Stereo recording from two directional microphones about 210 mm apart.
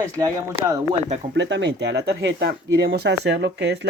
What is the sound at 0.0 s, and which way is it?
Speech, 15° right (ahead or behind).